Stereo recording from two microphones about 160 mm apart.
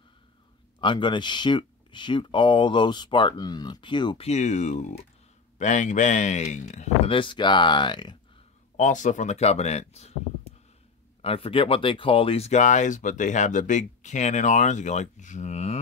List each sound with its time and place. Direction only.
0.7 s speech: 30° left (ahead or behind)
4.3 s speech: 50° left (ahead or behind)
7.1 s speech: 30° left (ahead or behind)
8.7 s speech: 50° left (ahead or behind)
11.2 s speech: 35° left (ahead or behind)